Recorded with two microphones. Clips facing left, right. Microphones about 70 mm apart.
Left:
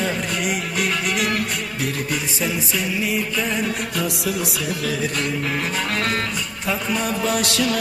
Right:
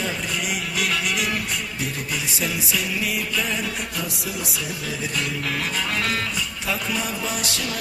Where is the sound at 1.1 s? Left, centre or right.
Left.